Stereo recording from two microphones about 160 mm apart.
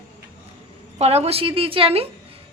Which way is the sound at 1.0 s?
40° right (ahead or behind).